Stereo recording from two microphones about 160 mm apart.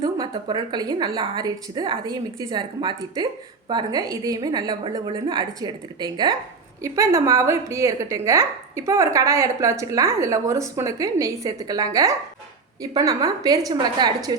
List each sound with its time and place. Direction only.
0.0 s a woman's voice: 25° right (ahead or behind)